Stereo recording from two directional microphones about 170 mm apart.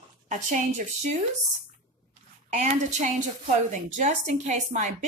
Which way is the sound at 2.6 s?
45° right (ahead or behind).